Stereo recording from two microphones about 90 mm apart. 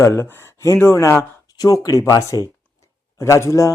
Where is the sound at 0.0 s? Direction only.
30° left (ahead or behind).